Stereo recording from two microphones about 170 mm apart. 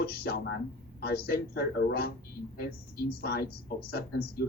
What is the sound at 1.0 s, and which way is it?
Speech, 65° left (ahead or behind).